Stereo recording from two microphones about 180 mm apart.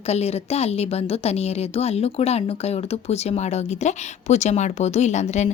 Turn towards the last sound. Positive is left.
turn(degrees=40)  # may be behind; listen again after turning